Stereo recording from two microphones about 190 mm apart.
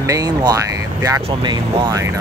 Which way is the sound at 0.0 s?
20° right (ahead or behind).